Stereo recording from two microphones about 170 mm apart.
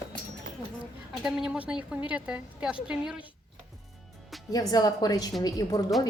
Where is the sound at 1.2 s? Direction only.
5° right (ahead or behind).